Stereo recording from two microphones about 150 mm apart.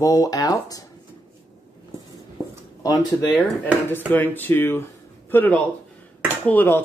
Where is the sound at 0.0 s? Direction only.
25° left (ahead or behind).